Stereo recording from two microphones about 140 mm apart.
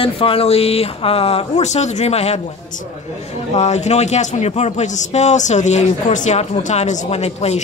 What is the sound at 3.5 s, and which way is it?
Speech, 55° left (ahead or behind).